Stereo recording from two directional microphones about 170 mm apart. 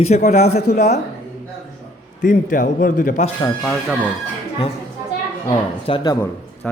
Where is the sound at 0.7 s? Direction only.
75° left (ahead or behind).